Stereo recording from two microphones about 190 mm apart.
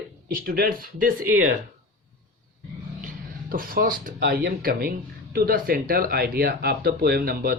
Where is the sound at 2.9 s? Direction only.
45° right (ahead or behind).